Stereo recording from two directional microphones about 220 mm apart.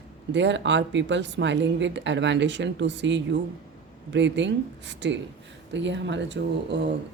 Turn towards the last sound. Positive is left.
turn(degrees=-50)  # may be behind; listen again after turning